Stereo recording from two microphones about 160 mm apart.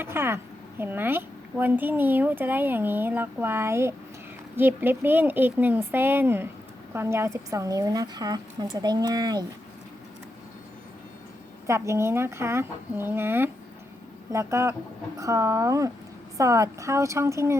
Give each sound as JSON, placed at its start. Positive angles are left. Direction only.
{"t": 0.0, "sound": "a woman's voice", "side_deg": -15}
{"t": 11.6, "sound": "a woman's voice", "side_deg": -15}